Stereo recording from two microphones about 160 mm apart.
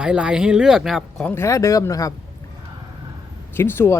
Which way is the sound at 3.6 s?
15° left (ahead or behind).